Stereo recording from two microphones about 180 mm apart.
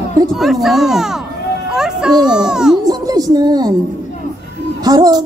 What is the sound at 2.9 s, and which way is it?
Speech, 20° right (ahead or behind).